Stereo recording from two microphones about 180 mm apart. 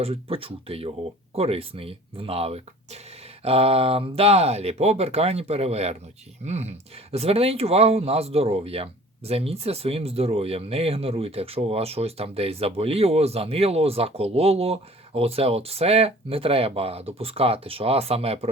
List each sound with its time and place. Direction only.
0.0 s speech: 30° right (ahead or behind)